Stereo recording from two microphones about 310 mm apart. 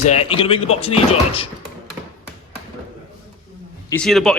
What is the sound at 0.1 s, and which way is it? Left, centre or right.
Speech, centre.